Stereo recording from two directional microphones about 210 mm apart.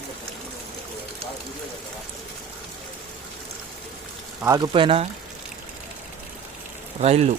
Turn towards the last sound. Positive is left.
turn(degrees=-30)  # may be behind; listen again after turning